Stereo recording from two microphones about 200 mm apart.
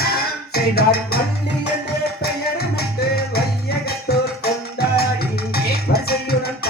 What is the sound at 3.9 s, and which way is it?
Music, 50° left (ahead or behind).